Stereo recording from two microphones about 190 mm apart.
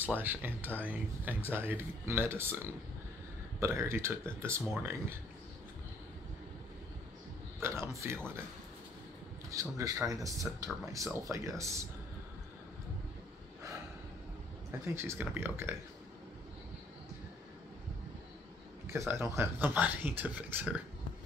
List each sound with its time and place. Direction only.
0.1 s speech: 10° right (ahead or behind)
0.6 s speech: 10° left (ahead or behind)
0.8 s speech: 10° right (ahead or behind)
7.6 s speech: 15° right (ahead or behind)
9.5 s speech: 15° right (ahead or behind)
15.0 s speech: 10° right (ahead or behind)
18.9 s speech: 15° right (ahead or behind)